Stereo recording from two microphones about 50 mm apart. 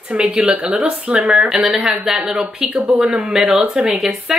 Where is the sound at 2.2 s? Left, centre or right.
Right.